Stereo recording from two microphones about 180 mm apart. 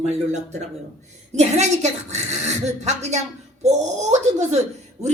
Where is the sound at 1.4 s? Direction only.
40° right (ahead or behind).